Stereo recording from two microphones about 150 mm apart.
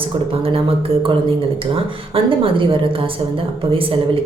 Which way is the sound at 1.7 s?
35° right (ahead or behind).